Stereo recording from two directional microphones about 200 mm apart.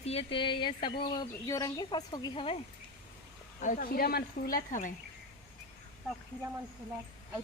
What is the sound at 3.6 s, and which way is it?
Speech, 40° left (ahead or behind).